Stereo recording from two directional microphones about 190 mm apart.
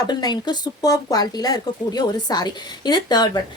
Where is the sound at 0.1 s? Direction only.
20° left (ahead or behind).